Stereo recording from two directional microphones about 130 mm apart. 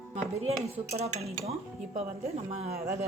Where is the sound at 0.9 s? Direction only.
55° right (ahead or behind).